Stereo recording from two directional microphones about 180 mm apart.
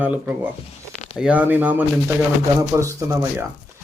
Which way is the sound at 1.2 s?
10° right (ahead or behind).